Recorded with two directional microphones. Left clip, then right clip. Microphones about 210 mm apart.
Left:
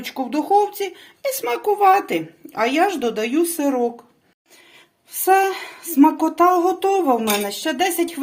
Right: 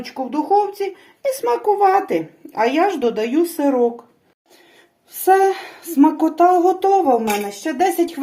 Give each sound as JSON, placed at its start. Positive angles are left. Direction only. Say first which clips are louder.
{"t": 0.1, "sound": "speech", "louder": "even", "side_deg": 35}
{"t": 5.2, "sound": "speech", "louder": "right 2 dB", "side_deg": 15}